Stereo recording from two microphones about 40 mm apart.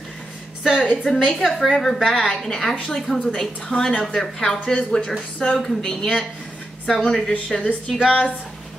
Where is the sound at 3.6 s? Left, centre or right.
Centre.